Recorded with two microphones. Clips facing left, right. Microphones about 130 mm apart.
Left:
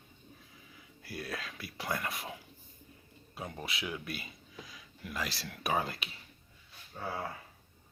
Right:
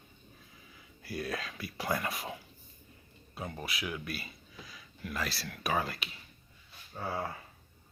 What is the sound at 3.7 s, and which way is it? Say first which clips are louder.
Speech: right 1 dB; 25° left (ahead or behind).